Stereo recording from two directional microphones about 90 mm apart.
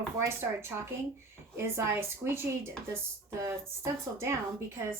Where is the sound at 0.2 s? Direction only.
30° right (ahead or behind).